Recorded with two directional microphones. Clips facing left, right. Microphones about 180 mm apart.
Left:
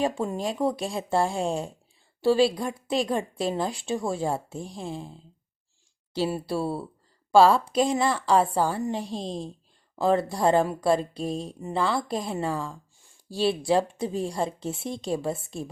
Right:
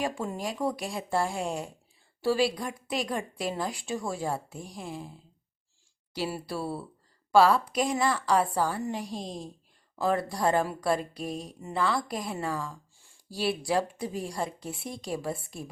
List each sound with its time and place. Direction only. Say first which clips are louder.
0.0 s a woman's voice: left 5 dB; 25° left (ahead or behind)
6.1 s a woman's voice: left 6 dB; 25° left (ahead or behind)